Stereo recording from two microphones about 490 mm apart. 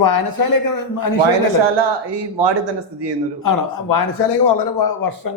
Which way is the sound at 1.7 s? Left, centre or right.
Right.